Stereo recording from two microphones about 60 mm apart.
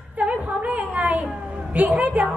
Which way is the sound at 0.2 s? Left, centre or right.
Right.